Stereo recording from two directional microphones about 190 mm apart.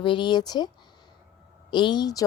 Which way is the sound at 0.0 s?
25° left (ahead or behind).